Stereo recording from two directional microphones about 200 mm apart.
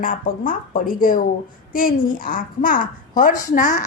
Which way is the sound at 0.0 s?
40° left (ahead or behind).